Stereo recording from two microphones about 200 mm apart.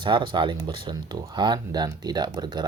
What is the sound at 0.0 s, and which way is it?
Speech, 25° right (ahead or behind).